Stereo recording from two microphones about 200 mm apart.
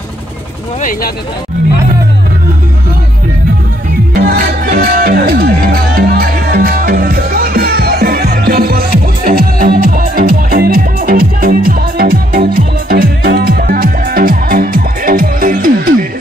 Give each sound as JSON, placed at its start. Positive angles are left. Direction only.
{"t": 4.1, "sound": "music", "side_deg": -50}